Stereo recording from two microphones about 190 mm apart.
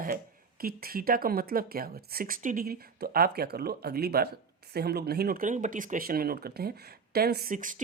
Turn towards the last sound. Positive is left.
turn(degrees=-45)  # may be behind; listen again after turning